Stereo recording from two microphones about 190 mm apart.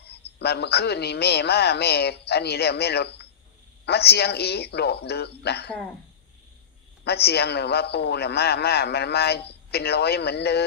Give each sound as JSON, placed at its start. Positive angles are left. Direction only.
{"t": 0.0, "sound": "a man's voice", "side_deg": 60}
{"t": 7.0, "sound": "a man's voice", "side_deg": 60}